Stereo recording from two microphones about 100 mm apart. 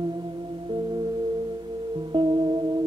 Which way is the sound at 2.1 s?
50° right (ahead or behind).